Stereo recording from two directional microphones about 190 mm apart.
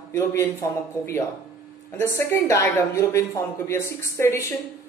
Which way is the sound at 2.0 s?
15° left (ahead or behind).